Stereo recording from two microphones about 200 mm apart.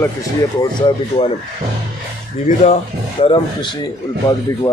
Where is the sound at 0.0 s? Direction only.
15° left (ahead or behind).